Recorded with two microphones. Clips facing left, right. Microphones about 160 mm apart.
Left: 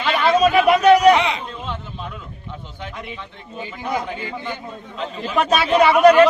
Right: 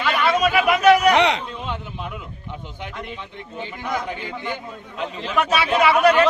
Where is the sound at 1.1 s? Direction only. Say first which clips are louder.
Right 1 dB; 70° right (ahead or behind).